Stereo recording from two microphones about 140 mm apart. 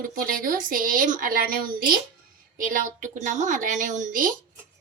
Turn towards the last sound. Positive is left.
turn(degrees=-75)  # may be behind; listen again after turning